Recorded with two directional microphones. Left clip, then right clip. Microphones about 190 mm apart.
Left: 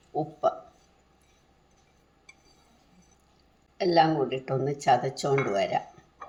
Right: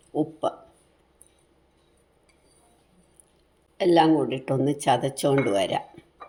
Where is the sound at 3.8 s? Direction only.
40° right (ahead or behind).